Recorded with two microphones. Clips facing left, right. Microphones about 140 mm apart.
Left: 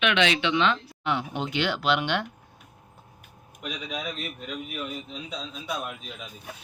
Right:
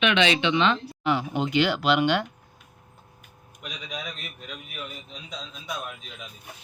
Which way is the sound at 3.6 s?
5° left (ahead or behind).